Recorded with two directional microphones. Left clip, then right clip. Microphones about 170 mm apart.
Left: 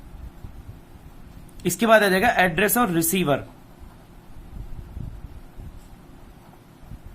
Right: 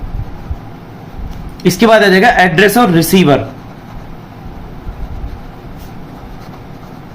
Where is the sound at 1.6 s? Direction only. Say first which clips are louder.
Right 10 dB; 50° left (ahead or behind).